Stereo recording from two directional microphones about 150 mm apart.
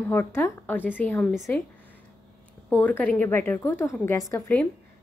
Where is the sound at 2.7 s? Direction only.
10° left (ahead or behind).